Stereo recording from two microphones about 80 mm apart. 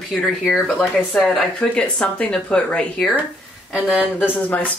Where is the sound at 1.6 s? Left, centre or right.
Centre.